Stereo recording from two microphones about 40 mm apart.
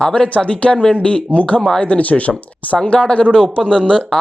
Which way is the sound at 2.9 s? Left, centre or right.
Left.